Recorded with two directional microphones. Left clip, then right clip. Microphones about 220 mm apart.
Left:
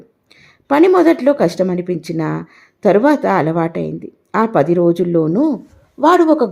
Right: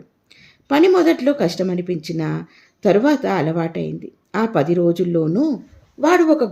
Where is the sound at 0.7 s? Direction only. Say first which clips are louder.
Left 3 dB; 10° left (ahead or behind).